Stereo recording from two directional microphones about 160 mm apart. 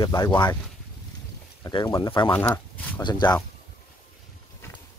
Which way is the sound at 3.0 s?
30° left (ahead or behind).